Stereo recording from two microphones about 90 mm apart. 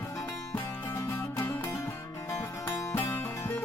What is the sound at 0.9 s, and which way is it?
Music, 35° left (ahead or behind).